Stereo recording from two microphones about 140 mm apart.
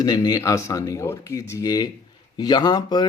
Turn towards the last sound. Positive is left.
turn(degrees=30)  # may be behind; listen again after turning